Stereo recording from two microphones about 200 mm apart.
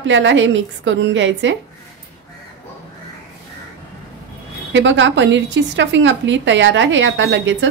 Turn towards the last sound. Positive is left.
turn(degrees=-60)  # may be behind; listen again after turning